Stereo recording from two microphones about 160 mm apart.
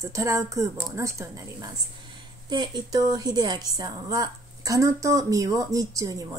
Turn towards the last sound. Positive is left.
turn(degrees=-20)  # may be behind; listen again after turning